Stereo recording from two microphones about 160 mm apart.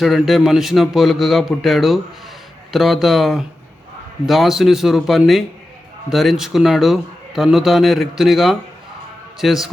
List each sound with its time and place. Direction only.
0.0 s speech: centre (ahead or behind)